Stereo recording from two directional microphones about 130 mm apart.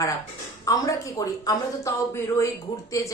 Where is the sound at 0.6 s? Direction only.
25° left (ahead or behind).